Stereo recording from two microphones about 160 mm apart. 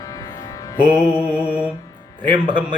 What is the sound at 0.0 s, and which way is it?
Music, 20° left (ahead or behind).